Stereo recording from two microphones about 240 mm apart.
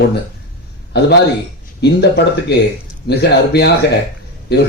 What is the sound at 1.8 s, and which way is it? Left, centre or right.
Speech, left.